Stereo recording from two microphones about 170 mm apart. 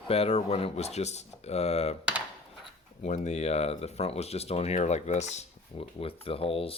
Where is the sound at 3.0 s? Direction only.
40° left (ahead or behind).